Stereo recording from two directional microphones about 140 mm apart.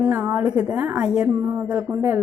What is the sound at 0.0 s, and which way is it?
A woman's voice, 15° right (ahead or behind).